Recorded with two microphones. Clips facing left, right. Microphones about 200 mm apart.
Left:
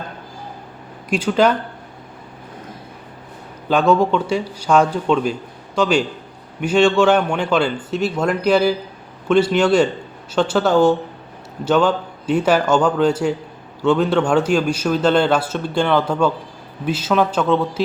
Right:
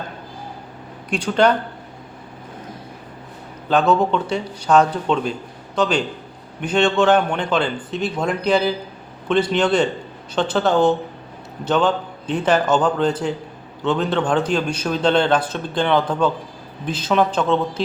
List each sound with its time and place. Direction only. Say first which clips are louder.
1.1 s a man's voice: left 1 dB; 5° left (ahead or behind)
3.7 s a man's voice: left 2 dB; 10° left (ahead or behind)